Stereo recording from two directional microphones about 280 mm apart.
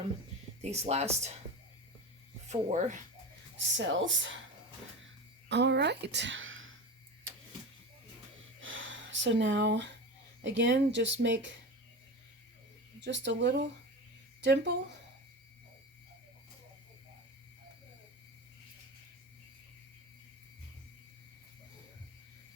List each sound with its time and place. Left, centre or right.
0.6 s speech: right
2.5 s speech: right
3.6 s speech: right
5.5 s speech: right
8.6 s a sound: right
10.4 s speech: right
13.1 s speech: right